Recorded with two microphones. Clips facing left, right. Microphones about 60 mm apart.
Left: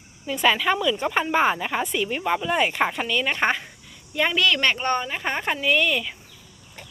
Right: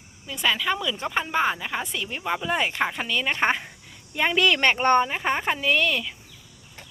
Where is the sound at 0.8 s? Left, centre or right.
Centre.